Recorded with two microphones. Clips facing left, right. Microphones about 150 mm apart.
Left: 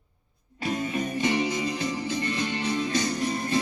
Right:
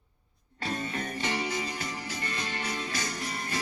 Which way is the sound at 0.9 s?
15° left (ahead or behind).